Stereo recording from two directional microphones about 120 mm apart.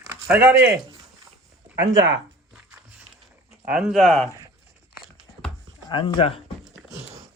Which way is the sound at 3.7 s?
5° right (ahead or behind).